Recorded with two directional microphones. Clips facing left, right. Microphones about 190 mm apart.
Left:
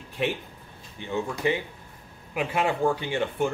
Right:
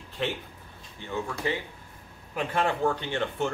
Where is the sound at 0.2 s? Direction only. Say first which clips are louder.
Left 3 dB; 15° left (ahead or behind).